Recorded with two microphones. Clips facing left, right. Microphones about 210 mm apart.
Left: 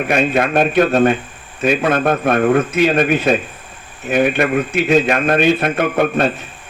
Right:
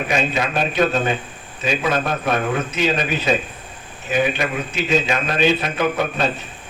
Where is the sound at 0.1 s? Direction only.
55° left (ahead or behind).